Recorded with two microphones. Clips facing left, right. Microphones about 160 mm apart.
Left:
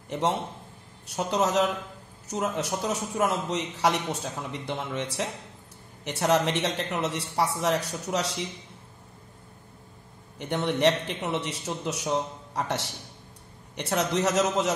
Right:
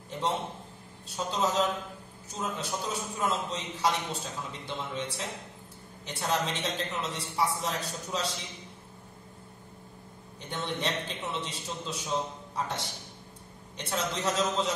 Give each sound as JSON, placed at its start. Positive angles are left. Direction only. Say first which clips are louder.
{"t": 1.0, "sound": "a man's voice", "louder": "left 4 dB", "side_deg": 70}
{"t": 10.4, "sound": "a man's voice", "louder": "left 10 dB", "side_deg": 70}